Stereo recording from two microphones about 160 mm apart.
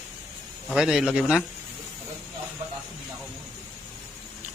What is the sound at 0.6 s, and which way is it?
Speech, 5° right (ahead or behind).